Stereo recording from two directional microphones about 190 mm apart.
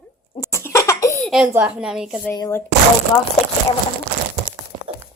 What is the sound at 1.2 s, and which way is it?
Speech, centre (ahead or behind).